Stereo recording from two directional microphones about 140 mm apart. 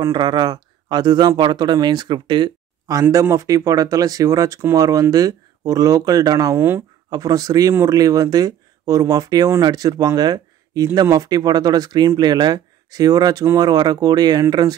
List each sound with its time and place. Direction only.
0.0 s speech: 30° right (ahead or behind)